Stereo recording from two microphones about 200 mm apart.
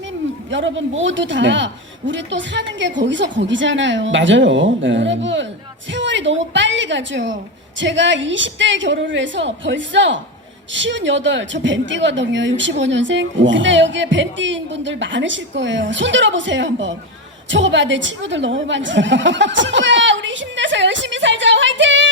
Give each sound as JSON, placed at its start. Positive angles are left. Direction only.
{"t": 0.5, "sound": "a man's voice", "side_deg": -65}